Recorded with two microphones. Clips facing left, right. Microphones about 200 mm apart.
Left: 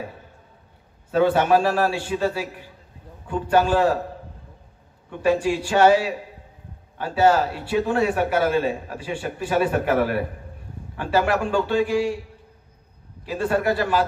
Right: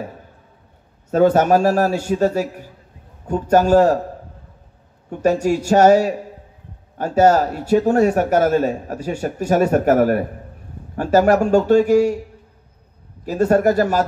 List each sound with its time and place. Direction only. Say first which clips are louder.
1.1 s speech: right 4 dB; 45° right (ahead or behind)
5.1 s speech: right 3 dB; 45° right (ahead or behind)
13.2 s speech: right 7 dB; 45° right (ahead or behind)